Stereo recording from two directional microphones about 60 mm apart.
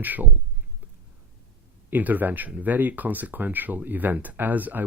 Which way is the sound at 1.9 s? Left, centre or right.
Right.